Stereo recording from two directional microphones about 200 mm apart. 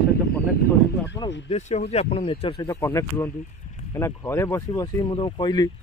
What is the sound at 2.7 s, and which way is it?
Speech, 15° left (ahead or behind).